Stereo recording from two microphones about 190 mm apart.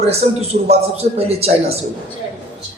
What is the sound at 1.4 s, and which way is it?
Speech, 30° right (ahead or behind).